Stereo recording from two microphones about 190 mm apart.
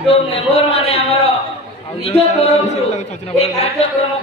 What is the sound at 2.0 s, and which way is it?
A man's voice, 30° left (ahead or behind).